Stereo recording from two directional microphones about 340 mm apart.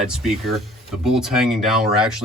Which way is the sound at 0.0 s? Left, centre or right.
Centre.